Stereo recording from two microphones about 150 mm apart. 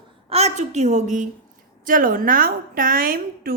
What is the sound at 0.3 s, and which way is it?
A woman's voice, 45° right (ahead or behind).